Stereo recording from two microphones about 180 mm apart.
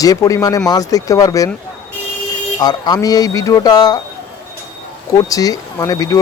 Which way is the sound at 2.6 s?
20° left (ahead or behind).